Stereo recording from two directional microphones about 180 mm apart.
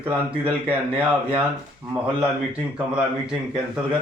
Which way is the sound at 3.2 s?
5° right (ahead or behind).